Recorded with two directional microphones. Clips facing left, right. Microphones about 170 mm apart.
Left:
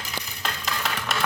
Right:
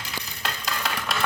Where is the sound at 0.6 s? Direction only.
Centre (ahead or behind).